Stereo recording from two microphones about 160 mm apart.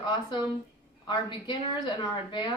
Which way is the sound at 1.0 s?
30° left (ahead or behind).